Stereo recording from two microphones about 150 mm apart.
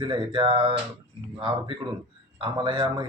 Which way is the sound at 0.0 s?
35° right (ahead or behind).